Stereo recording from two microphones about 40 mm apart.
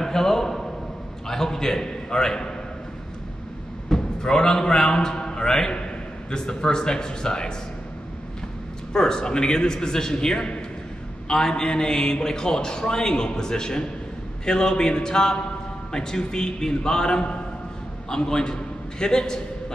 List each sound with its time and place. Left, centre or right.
0.0 s a sound: centre
1.2 s a man's voice: centre
3.9 s a man's voice: centre
8.9 s a man's voice: centre